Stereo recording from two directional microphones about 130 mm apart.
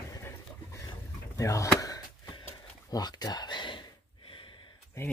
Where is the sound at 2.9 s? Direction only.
30° left (ahead or behind).